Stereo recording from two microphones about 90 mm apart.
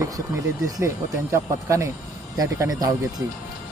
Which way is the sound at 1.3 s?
30° right (ahead or behind).